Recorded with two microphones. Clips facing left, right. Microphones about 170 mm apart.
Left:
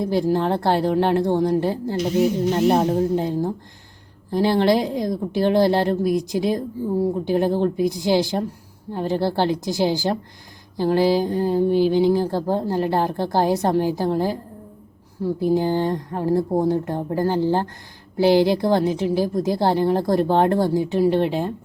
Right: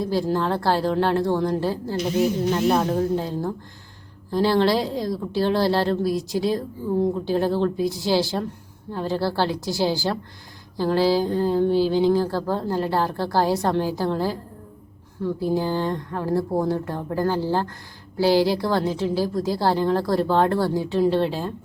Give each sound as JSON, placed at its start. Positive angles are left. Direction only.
{"t": 0.0, "sound": "a woman's voice", "side_deg": 20}
{"t": 15.4, "sound": "a woman's voice", "side_deg": 20}